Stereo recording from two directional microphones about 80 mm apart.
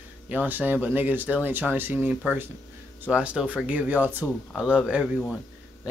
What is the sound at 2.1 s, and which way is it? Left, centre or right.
Speech, centre.